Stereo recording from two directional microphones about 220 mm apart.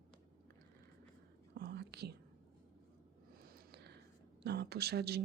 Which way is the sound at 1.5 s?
45° right (ahead or behind).